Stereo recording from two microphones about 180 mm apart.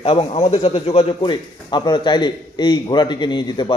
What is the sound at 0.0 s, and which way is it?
A man's voice, 30° left (ahead or behind).